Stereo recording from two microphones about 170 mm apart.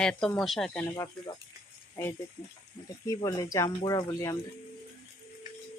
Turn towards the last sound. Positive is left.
turn(degrees=20)  # may be behind; listen again after turning